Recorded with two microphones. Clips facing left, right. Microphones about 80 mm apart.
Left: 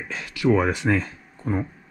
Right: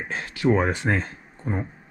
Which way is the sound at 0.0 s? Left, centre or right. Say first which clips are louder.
Even; right.